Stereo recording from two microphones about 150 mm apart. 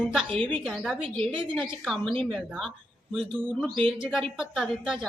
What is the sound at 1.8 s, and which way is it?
A woman's voice, 5° left (ahead or behind).